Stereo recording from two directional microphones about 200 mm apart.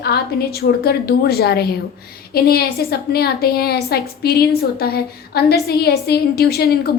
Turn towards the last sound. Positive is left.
turn(degrees=50)  # may be behind; listen again after turning